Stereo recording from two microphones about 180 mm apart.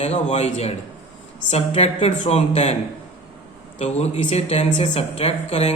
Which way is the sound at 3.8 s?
35° left (ahead or behind).